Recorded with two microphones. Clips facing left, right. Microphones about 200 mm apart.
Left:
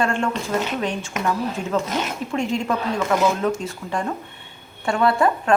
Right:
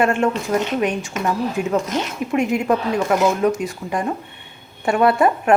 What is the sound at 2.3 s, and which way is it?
Speech, 20° right (ahead or behind).